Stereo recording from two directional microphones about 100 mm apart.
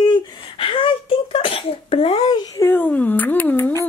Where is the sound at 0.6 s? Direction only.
60° left (ahead or behind).